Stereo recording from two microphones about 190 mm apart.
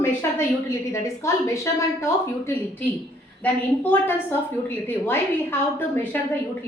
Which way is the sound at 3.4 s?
10° left (ahead or behind).